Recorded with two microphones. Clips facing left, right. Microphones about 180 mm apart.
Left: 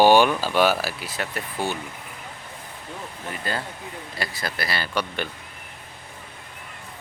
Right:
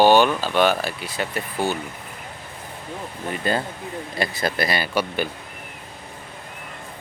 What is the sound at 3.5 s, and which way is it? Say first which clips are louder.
Speech: right 6 dB; 20° right (ahead or behind).